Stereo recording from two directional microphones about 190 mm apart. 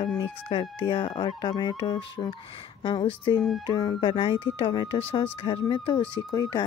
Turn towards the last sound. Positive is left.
turn(degrees=20)  # may be behind; listen again after turning